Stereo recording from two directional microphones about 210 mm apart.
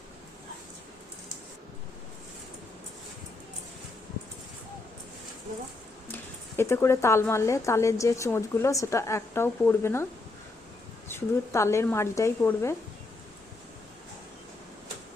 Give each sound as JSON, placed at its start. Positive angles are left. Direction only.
{"t": 6.6, "sound": "a woman's voice", "side_deg": 10}
{"t": 11.1, "sound": "a woman's voice", "side_deg": 15}